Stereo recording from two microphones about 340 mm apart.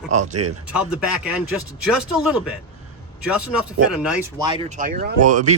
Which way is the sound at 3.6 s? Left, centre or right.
Centre.